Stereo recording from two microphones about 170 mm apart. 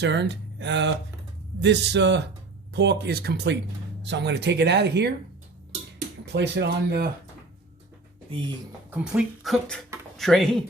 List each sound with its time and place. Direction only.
0.0 s speech: 90° right
6.2 s speech: 90° right
8.9 s speech: 5° right (ahead or behind)